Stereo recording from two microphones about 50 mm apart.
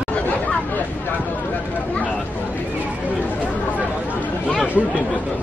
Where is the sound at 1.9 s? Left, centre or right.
Left.